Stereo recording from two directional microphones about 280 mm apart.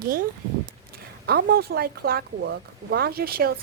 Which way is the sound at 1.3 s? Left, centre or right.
Right.